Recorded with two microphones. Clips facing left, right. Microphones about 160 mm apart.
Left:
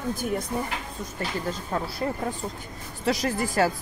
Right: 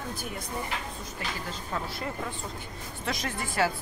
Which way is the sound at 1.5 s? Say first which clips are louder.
Left 5 dB; 40° left (ahead or behind).